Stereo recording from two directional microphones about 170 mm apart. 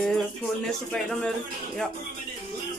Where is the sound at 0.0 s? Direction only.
5° left (ahead or behind).